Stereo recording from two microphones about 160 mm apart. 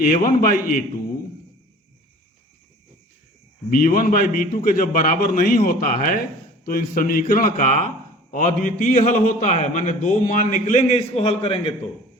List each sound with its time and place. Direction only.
0.0 s a man's voice: 60° left (ahead or behind)
3.7 s a man's voice: 65° left (ahead or behind); by 11.7 s 35° left (ahead or behind)